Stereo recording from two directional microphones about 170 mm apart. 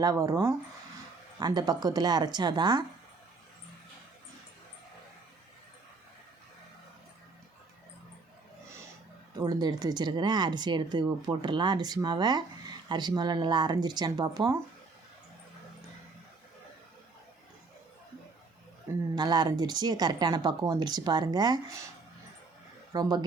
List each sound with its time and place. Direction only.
0.0 s speech: 20° right (ahead or behind)
9.4 s speech: 25° right (ahead or behind)
19.1 s speech: 25° right (ahead or behind)
22.9 s speech: 25° right (ahead or behind)